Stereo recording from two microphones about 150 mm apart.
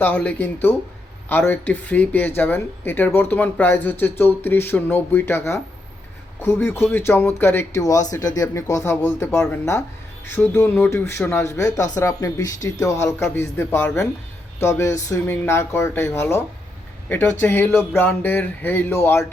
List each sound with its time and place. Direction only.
0.0 s speech: 10° left (ahead or behind)